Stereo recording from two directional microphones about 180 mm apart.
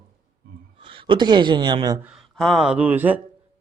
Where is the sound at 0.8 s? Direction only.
30° right (ahead or behind).